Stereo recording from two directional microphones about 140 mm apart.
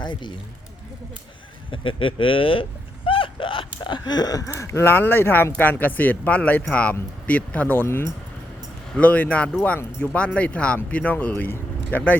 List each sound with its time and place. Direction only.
0.0 s speech: 35° left (ahead or behind)
1.7 s speech: 35° left (ahead or behind); by 12.1 s 15° left (ahead or behind)